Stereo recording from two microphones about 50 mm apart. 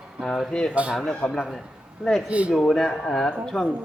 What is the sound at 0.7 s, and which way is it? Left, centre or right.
Speech, right.